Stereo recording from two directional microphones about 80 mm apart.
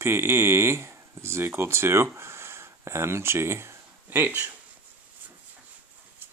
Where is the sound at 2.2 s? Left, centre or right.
Right.